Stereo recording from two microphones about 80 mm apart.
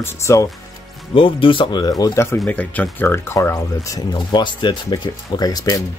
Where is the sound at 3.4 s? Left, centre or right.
Left.